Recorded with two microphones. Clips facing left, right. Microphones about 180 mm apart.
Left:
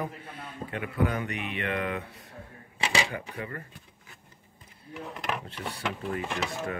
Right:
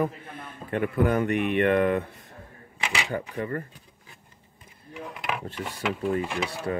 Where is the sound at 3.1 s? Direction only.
45° right (ahead or behind).